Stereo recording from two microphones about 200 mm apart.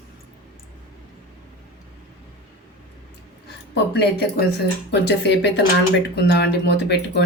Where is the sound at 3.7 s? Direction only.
55° left (ahead or behind).